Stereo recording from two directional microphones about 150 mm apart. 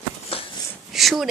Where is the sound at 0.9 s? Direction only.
Centre (ahead or behind).